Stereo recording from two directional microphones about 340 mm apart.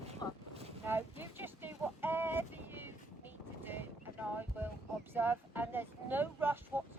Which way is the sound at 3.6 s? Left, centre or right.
Centre.